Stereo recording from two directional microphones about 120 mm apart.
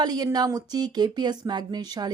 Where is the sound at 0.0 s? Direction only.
35° right (ahead or behind).